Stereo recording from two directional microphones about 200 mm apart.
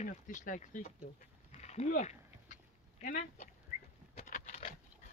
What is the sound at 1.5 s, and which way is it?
Dog, 35° left (ahead or behind).